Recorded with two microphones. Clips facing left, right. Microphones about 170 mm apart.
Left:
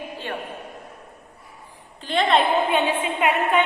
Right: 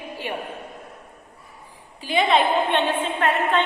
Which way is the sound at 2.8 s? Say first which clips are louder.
Even; 10° left (ahead or behind).